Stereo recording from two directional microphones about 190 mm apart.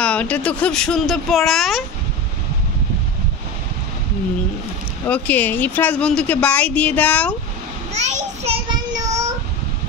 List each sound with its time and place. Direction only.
0.0 s speech: 5° left (ahead or behind)
5.0 s speech: 10° left (ahead or behind)
7.9 s a sound: 35° right (ahead or behind)